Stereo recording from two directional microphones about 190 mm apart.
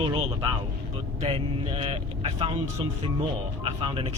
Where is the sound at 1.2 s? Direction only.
30° right (ahead or behind).